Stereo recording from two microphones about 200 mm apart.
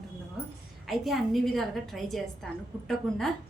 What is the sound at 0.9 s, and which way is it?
A woman's voice, centre (ahead or behind).